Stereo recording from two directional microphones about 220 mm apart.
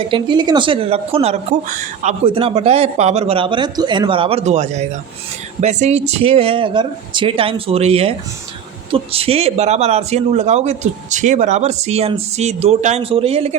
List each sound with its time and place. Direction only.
0.1 s speech: 20° right (ahead or behind)